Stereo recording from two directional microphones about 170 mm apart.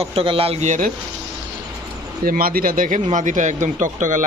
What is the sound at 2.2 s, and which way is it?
Speech, 60° right (ahead or behind).